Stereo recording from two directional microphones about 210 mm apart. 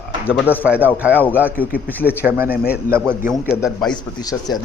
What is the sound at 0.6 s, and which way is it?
Speech, 5° right (ahead or behind).